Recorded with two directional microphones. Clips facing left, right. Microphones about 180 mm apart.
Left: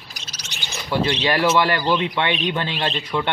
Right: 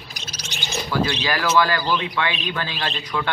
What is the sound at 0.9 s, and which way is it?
A man's voice, 25° left (ahead or behind).